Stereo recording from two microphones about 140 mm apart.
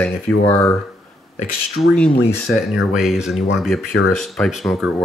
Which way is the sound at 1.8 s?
5° left (ahead or behind).